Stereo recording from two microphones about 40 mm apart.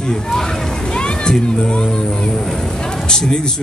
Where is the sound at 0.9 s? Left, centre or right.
Centre.